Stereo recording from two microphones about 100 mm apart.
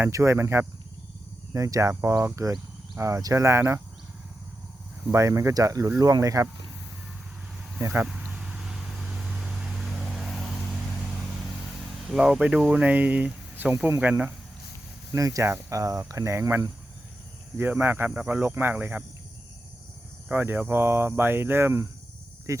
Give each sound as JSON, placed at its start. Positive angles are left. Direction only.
{"t": 0.0, "sound": "speech", "side_deg": -30}
{"t": 5.1, "sound": "speech", "side_deg": -30}
{"t": 7.8, "sound": "speech", "side_deg": -25}
{"t": 8.3, "sound": "vehicle", "side_deg": -10}
{"t": 12.1, "sound": "speech", "side_deg": -5}
{"t": 15.1, "sound": "speech", "side_deg": -35}
{"t": 20.3, "sound": "speech", "side_deg": -20}